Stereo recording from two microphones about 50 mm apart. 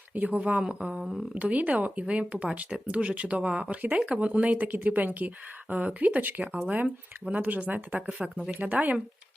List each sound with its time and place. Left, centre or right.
0.1 s speech: right
1.4 s speech: right